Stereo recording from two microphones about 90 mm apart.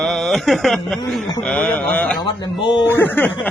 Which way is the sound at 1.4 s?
15° left (ahead or behind).